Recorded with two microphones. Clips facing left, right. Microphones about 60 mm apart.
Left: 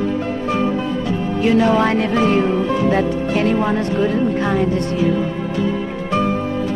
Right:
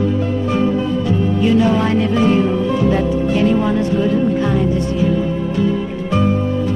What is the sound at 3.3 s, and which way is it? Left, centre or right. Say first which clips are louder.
Speech: right 3 dB; left.